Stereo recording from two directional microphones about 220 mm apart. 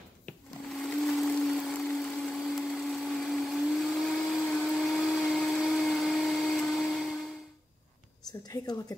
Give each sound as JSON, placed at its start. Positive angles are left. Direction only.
{"t": 0.8, "sound": "blender", "side_deg": 0}
{"t": 8.3, "sound": "a woman's voice", "side_deg": 15}